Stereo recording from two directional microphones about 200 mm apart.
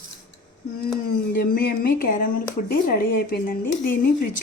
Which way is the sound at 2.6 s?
45° left (ahead or behind).